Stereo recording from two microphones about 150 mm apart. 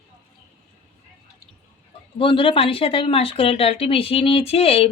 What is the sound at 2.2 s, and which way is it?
Speech, 35° left (ahead or behind).